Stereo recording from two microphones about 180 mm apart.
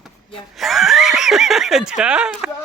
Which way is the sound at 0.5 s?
Centre (ahead or behind).